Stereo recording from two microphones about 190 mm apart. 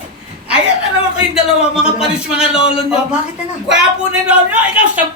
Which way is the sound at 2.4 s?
30° left (ahead or behind).